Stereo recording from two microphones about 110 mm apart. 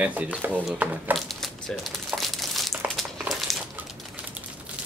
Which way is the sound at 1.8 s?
Centre (ahead or behind).